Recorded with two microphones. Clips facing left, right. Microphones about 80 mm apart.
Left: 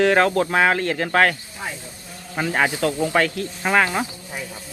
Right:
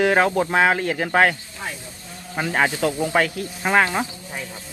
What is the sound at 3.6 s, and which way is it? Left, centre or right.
Speech, centre.